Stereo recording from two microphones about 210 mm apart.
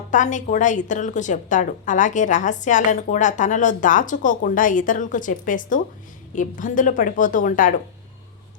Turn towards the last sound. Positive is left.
turn(degrees=40)  # may be behind; listen again after turning